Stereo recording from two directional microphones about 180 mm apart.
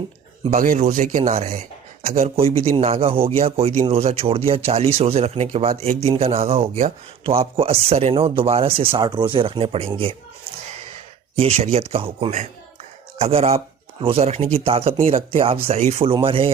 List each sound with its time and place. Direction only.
0.5 s speech: 50° right (ahead or behind); by 10.2 s 30° right (ahead or behind)
11.3 s speech: 35° right (ahead or behind)